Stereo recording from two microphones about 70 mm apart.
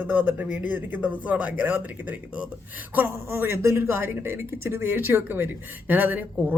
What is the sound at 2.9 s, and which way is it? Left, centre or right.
Speech, right.